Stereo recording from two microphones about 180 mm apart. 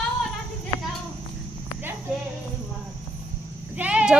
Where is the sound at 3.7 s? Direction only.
5° right (ahead or behind).